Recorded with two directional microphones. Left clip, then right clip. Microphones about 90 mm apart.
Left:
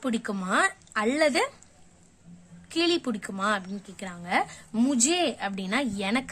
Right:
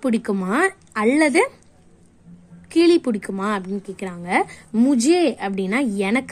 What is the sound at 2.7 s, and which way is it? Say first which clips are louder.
A woman's voice: right 10 dB; 40° right (ahead or behind).